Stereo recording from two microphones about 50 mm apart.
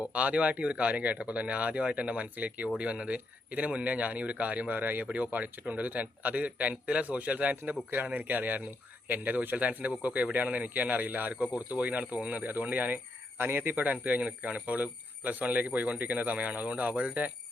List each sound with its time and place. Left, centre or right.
0.1 s speech: right
4.7 s speech: right
13.7 s speech: right